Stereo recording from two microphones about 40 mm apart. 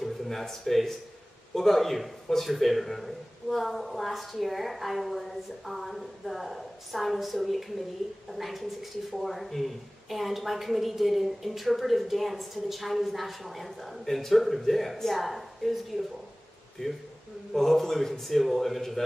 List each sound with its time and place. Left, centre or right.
0.0 s speech: centre
16.8 s speech: centre
17.5 s speech: centre